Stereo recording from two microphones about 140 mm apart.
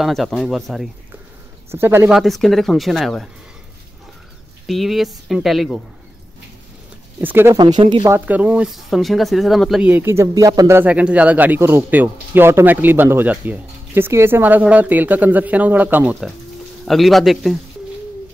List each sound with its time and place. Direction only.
0.0 s speech: centre (ahead or behind)
1.7 s speech: 15° right (ahead or behind)
2.1 s speech: centre (ahead or behind)
4.6 s speech: centre (ahead or behind)
7.2 s speech: 15° right (ahead or behind)
9.8 s speech: 15° right (ahead or behind)
10.8 s speech: 10° right (ahead or behind)
16.8 s speech: centre (ahead or behind)